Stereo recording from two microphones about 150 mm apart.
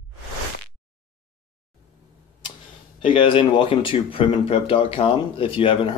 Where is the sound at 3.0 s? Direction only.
35° left (ahead or behind).